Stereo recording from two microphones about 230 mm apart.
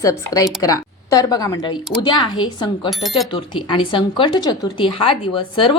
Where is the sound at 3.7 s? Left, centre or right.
Left.